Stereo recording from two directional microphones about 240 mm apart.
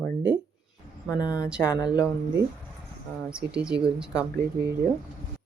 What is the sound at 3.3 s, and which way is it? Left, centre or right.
Speech, centre.